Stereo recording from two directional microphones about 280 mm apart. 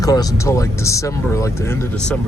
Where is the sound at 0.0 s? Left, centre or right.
Centre.